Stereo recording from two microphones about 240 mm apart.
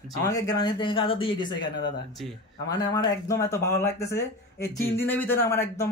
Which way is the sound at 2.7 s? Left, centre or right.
Centre.